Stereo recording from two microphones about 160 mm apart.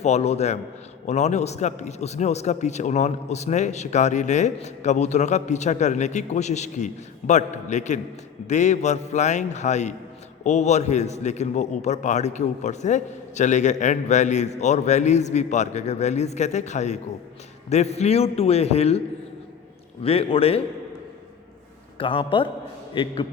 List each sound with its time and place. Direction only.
0.0 s a man's voice: 40° left (ahead or behind)
20.1 s a man's voice: 35° left (ahead or behind)
21.9 s a man's voice: 35° left (ahead or behind)